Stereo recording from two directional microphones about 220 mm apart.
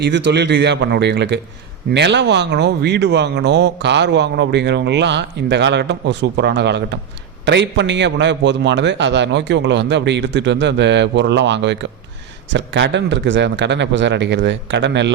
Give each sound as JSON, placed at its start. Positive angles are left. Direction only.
{"t": 0.3, "sound": "speech", "side_deg": -50}